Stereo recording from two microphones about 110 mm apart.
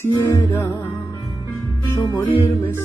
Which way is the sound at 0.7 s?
40° left (ahead or behind).